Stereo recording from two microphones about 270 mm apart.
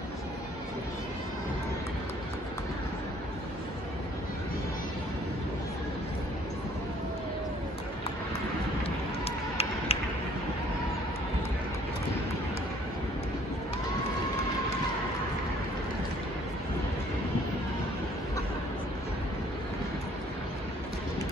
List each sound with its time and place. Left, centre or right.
8.8 s run: left